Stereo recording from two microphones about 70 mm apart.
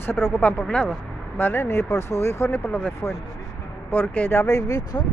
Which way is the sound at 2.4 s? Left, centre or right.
Centre.